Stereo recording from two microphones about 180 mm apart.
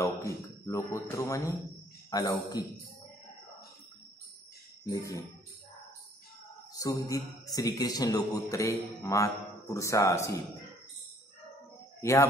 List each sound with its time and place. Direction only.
0.0 s a man's voice: 15° left (ahead or behind)
4.8 s a man's voice: 20° left (ahead or behind)
6.8 s a man's voice: 20° left (ahead or behind)
12.0 s a man's voice: 15° left (ahead or behind)